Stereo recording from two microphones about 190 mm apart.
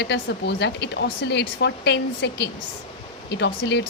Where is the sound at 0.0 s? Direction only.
65° left (ahead or behind).